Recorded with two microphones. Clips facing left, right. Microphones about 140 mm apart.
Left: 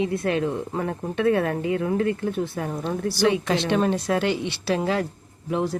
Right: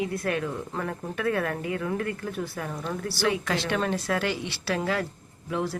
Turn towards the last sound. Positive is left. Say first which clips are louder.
# left 4 dB
turn(degrees=20)  # may be behind; listen again after turning